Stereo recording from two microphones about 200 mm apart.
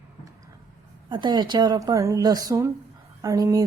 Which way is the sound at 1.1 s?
20° right (ahead or behind).